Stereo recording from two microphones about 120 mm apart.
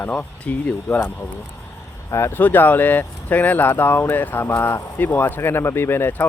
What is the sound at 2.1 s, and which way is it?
Speech, 20° left (ahead or behind).